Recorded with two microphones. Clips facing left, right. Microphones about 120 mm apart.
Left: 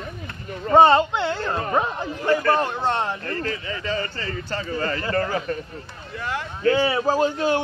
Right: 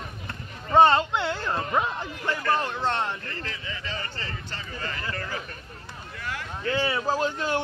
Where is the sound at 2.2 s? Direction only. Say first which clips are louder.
Left 7 dB; 45° left (ahead or behind).